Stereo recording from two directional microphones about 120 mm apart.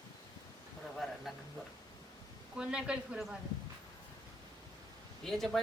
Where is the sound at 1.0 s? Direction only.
Centre (ahead or behind).